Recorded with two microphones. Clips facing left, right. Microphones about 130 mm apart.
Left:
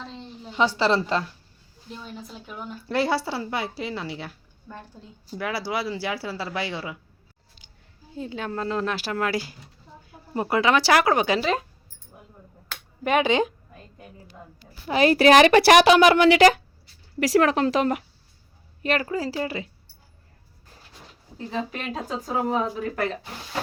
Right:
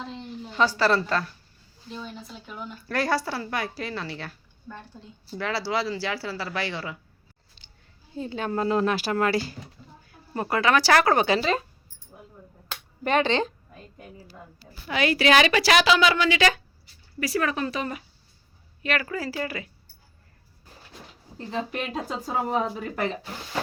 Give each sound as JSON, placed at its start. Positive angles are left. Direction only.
{"t": 0.8, "sound": "speech", "side_deg": 15}
{"t": 2.1, "sound": "speech", "side_deg": 5}
{"t": 2.9, "sound": "speech", "side_deg": 20}
{"t": 7.6, "sound": "a sound", "side_deg": 5}
{"t": 8.1, "sound": "speech", "side_deg": 0}
{"t": 9.3, "sound": "speech", "side_deg": 15}
{"t": 11.0, "sound": "speech", "side_deg": 5}
{"t": 13.1, "sound": "speech", "side_deg": 10}
{"t": 14.8, "sound": "a woman's voice", "side_deg": 35}
{"t": 17.2, "sound": "speech", "side_deg": 85}
{"t": 18.8, "sound": "speech", "side_deg": 40}
{"t": 21.3, "sound": "speech", "side_deg": 0}